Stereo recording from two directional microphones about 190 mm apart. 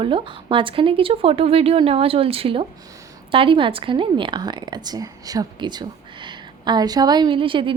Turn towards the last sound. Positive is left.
turn(degrees=-25)  # may be behind; listen again after turning